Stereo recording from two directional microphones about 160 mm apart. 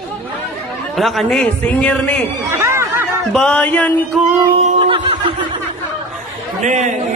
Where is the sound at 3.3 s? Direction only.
10° left (ahead or behind).